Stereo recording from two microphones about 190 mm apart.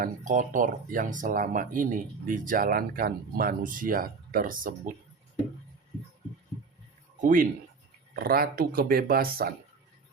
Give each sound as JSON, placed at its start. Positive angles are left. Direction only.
{"t": 0.0, "sound": "speech", "side_deg": -45}
{"t": 7.2, "sound": "speech", "side_deg": -45}